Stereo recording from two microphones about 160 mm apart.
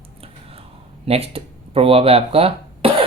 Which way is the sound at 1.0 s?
40° right (ahead or behind).